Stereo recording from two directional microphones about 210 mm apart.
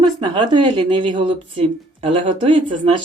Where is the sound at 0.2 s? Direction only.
20° right (ahead or behind).